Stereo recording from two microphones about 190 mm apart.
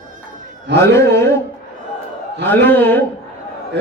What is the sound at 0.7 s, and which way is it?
Speech, 15° left (ahead or behind).